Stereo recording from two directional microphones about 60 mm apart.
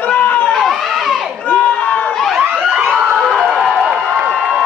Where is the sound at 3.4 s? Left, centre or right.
Centre.